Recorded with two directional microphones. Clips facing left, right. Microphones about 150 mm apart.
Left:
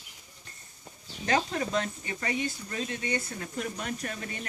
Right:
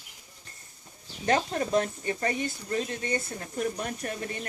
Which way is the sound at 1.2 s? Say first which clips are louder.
Right 2 dB; 35° right (ahead or behind).